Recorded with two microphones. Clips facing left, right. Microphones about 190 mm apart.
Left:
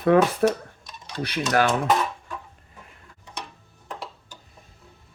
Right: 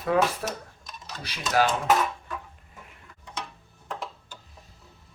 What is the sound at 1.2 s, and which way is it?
Speech, 60° left (ahead or behind).